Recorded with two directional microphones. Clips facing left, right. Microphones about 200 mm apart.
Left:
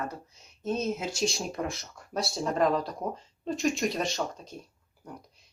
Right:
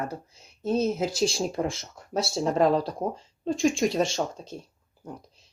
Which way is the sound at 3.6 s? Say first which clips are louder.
Right 5 dB; centre (ahead or behind).